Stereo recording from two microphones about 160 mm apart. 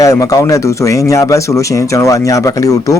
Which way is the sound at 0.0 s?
20° left (ahead or behind).